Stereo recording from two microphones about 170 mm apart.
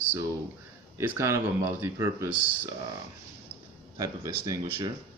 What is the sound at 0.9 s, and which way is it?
Speech, 15° right (ahead or behind).